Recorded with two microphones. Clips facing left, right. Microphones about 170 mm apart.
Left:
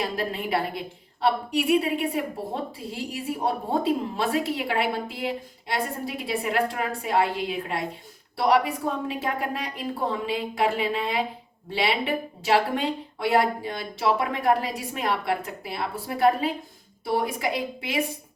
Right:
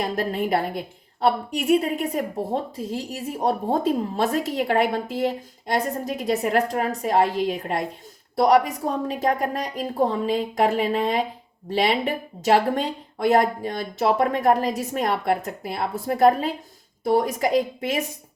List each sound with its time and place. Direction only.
0.0 s a woman's voice: 45° right (ahead or behind)